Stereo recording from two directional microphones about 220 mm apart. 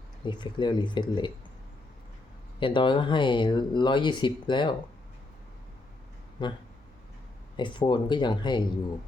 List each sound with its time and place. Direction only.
0.3 s speech: 20° left (ahead or behind)
2.6 s speech: 20° left (ahead or behind)
6.4 s speech: 20° left (ahead or behind)